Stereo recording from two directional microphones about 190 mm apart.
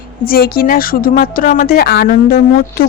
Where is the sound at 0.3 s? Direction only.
50° left (ahead or behind).